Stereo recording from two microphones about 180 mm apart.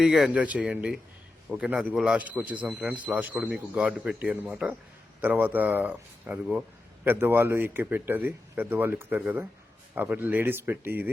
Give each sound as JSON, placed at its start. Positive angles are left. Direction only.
{"t": 0.0, "sound": "speech", "side_deg": 0}